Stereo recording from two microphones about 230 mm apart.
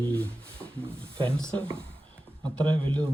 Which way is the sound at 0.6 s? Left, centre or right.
Centre.